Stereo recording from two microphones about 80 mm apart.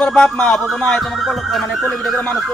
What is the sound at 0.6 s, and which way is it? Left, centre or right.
Music, centre.